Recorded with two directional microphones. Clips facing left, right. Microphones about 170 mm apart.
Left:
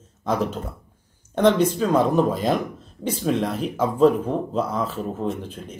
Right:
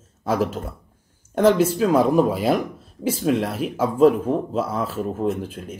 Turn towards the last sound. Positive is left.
turn(degrees=-5)  # may be behind; listen again after turning